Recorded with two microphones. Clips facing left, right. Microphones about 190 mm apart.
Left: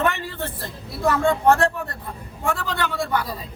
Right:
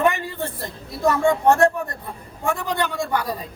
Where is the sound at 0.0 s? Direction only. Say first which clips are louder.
Right 3 dB; 15° right (ahead or behind).